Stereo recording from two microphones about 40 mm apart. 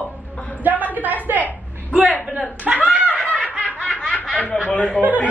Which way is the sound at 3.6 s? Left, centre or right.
Left.